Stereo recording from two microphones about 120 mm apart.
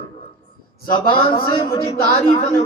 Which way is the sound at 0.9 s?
45° left (ahead or behind).